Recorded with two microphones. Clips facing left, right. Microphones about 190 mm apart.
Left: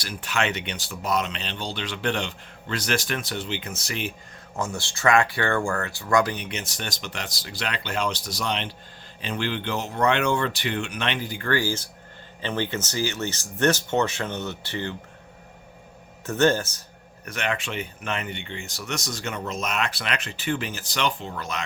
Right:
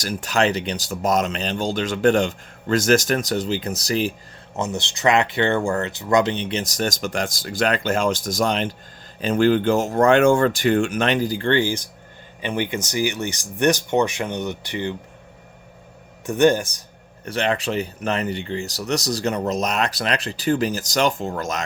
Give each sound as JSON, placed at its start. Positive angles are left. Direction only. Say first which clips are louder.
{"t": 0.0, "sound": "speech", "louder": "right 7 dB", "side_deg": -40}
{"t": 4.5, "sound": "speech", "louder": "right 4 dB", "side_deg": -20}
{"t": 16.2, "sound": "speech", "louder": "right 4 dB", "side_deg": -15}
{"t": 17.2, "sound": "speech", "louder": "right 7 dB", "side_deg": -30}